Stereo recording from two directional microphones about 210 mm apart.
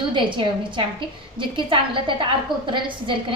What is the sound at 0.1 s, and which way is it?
A woman's voice, 25° right (ahead or behind).